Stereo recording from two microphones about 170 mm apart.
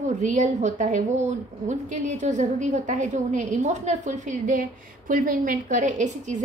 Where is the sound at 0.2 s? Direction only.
45° right (ahead or behind).